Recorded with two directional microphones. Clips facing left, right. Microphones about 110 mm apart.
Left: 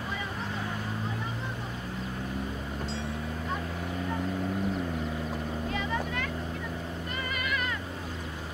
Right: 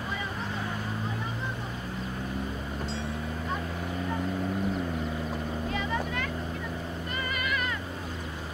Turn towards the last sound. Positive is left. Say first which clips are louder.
# right 1 dB
turn(degrees=-15)  # may be behind; listen again after turning